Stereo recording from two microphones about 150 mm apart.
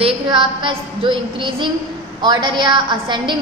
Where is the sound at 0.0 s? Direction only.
35° right (ahead or behind).